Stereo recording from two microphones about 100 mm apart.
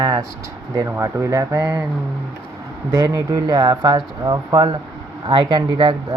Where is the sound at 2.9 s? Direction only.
40° right (ahead or behind).